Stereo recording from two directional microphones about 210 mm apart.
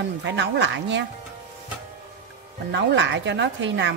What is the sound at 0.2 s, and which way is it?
Speech, 60° right (ahead or behind).